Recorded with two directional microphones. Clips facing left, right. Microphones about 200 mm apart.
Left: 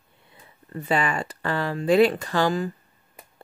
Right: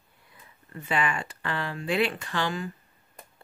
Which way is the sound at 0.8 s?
40° left (ahead or behind).